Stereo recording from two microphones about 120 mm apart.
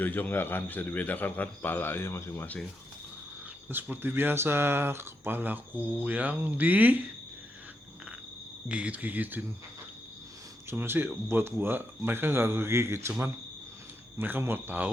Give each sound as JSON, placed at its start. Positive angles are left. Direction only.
{"t": 0.0, "sound": "a man's voice", "side_deg": 15}
{"t": 3.7, "sound": "speech", "side_deg": -15}
{"t": 8.7, "sound": "speech", "side_deg": -10}
{"t": 10.7, "sound": "speech", "side_deg": -20}